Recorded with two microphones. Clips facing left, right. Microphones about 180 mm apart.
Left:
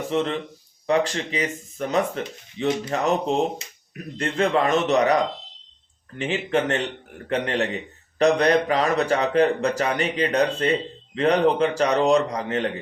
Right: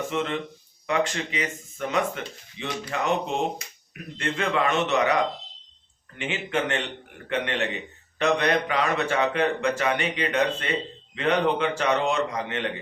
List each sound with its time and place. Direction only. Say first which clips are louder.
0.1 s a man's voice: left 4 dB; 35° left (ahead or behind)
3.6 s speech: left 1 dB; 25° left (ahead or behind)
4.2 s a man's voice: left 4 dB; 40° left (ahead or behind)
6.1 s a man's voice: left 5 dB; 35° left (ahead or behind)